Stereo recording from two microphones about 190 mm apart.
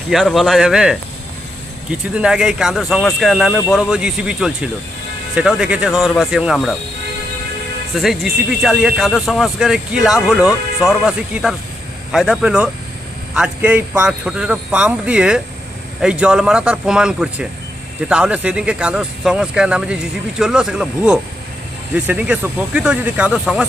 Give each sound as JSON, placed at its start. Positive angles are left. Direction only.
{"t": 0.1, "sound": "speech", "side_deg": 0}
{"t": 7.9, "sound": "speech", "side_deg": 0}